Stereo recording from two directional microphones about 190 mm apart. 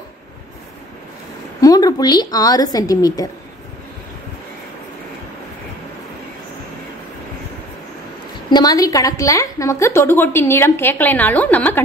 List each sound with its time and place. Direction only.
1.6 s a woman's voice: 20° left (ahead or behind)
8.5 s a woman's voice: 20° left (ahead or behind)